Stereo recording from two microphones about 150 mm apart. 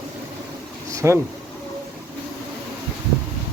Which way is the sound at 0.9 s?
20° right (ahead or behind).